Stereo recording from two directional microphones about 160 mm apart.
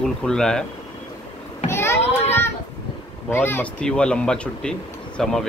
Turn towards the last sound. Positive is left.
turn(degrees=5)  # may be behind; listen again after turning